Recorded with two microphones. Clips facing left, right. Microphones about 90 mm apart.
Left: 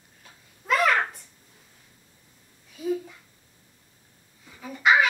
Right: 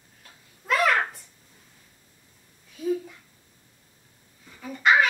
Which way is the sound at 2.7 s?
Centre (ahead or behind).